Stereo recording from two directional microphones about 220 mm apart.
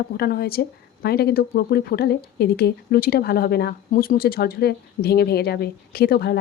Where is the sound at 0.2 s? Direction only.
45° left (ahead or behind).